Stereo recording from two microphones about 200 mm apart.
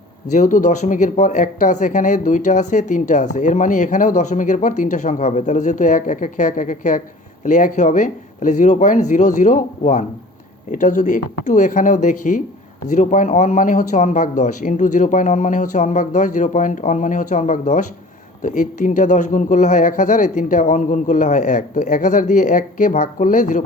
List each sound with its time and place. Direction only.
0.3 s speech: 40° left (ahead or behind)